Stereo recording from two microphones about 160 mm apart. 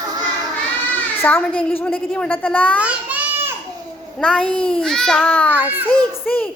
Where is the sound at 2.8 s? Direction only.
10° right (ahead or behind).